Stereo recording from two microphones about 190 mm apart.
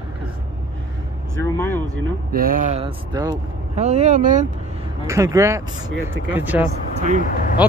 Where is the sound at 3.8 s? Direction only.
35° right (ahead or behind).